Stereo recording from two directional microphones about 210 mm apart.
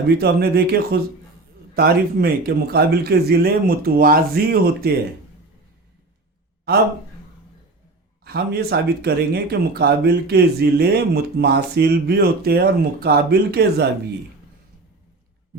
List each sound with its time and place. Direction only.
0.2 s speech: 50° right (ahead or behind)
6.7 s speech: 50° right (ahead or behind)
8.2 s speech: 50° right (ahead or behind)